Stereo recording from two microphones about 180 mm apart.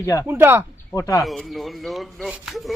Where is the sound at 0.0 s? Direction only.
15° left (ahead or behind).